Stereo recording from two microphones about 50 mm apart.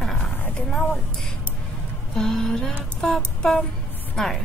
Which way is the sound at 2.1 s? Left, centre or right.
Centre.